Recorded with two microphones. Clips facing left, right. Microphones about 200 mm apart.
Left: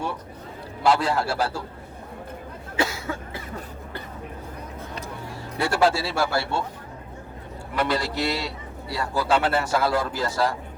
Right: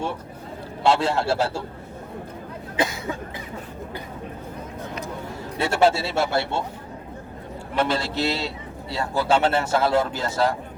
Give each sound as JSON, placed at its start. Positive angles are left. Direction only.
{"t": 0.8, "sound": "a man's voice", "side_deg": -25}
{"t": 2.7, "sound": "cough", "side_deg": -20}
{"t": 5.5, "sound": "a man's voice", "side_deg": -25}
{"t": 7.8, "sound": "a man's voice", "side_deg": -25}